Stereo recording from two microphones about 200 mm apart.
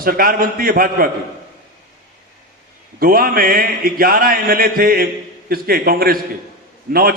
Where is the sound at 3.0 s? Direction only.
45° right (ahead or behind).